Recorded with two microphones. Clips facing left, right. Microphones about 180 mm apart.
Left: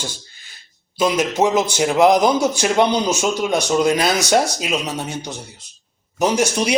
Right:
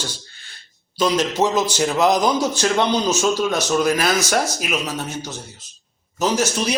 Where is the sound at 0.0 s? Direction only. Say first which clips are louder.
Left 1 dB; 10° left (ahead or behind).